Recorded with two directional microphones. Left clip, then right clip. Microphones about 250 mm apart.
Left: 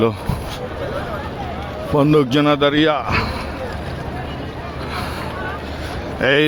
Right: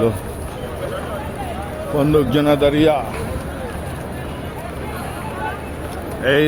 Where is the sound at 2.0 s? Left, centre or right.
Centre.